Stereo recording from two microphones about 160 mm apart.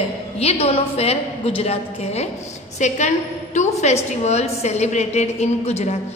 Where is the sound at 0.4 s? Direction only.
40° left (ahead or behind).